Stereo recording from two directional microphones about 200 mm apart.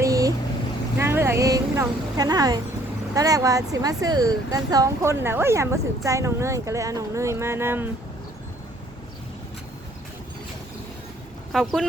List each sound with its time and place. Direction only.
0.0 s boat: 15° right (ahead or behind)
0.9 s a sound: 10° right (ahead or behind)
3.2 s speech: 15° right (ahead or behind)
11.5 s speech: centre (ahead or behind)